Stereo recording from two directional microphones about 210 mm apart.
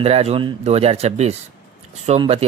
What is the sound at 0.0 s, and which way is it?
Speech, 30° right (ahead or behind).